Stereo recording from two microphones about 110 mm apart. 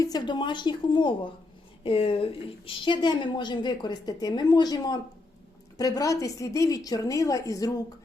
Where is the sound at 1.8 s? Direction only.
55° left (ahead or behind).